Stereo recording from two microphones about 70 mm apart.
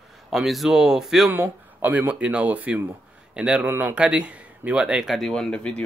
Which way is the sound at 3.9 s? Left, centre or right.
Centre.